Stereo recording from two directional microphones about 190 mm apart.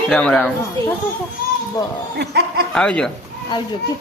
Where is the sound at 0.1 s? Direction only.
5° left (ahead or behind).